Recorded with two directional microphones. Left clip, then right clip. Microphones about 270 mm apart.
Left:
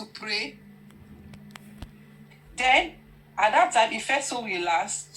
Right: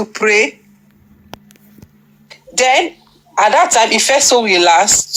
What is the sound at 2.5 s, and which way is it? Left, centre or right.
Speech, right.